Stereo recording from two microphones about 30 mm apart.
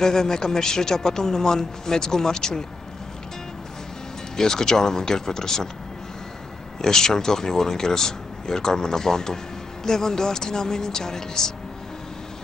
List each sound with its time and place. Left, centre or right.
0.0 s speech: centre
4.4 s speech: centre
6.8 s speech: centre